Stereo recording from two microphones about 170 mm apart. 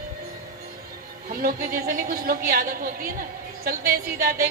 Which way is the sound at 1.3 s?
60° right (ahead or behind).